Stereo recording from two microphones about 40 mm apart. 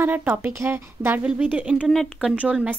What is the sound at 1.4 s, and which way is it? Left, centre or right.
Speech, right.